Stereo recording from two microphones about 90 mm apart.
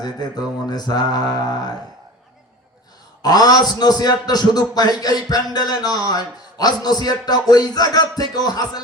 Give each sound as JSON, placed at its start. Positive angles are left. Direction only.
{"t": 0.7, "sound": "a man's voice", "side_deg": 45}
{"t": 3.2, "sound": "a man's voice", "side_deg": 45}